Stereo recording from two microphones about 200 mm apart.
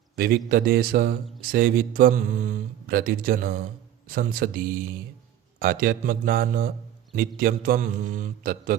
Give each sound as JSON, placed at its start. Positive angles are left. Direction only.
{"t": 0.2, "sound": "speech", "side_deg": -50}